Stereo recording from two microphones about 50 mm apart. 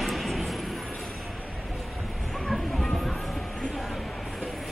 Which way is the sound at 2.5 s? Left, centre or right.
Centre.